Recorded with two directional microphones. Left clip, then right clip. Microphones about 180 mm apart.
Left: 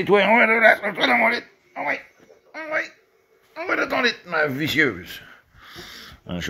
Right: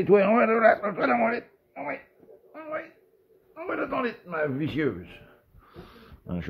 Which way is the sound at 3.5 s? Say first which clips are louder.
Left 7 dB; 20° left (ahead or behind).